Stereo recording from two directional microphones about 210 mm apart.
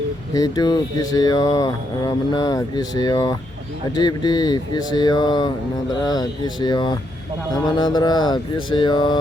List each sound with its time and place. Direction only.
0.3 s speech: 20° left (ahead or behind)